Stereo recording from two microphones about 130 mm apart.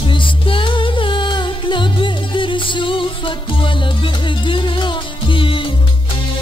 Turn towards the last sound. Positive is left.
turn(degrees=40)  # may be behind; listen again after turning